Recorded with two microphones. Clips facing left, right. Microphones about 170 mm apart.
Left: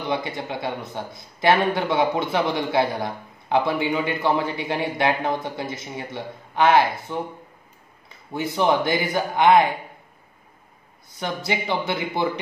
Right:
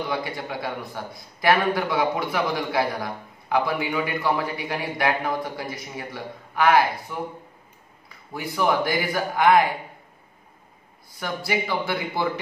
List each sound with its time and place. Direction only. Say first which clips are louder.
0.1 s a man's voice: left 2 dB; 20° left (ahead or behind)
11.1 s a man's voice: left 1 dB; 20° left (ahead or behind)